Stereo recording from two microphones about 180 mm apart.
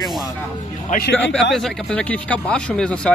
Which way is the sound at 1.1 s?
10° left (ahead or behind).